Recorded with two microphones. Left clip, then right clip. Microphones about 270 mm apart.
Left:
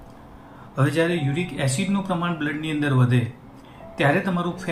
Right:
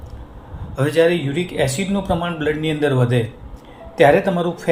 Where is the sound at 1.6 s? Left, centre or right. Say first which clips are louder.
Right 5 dB; right.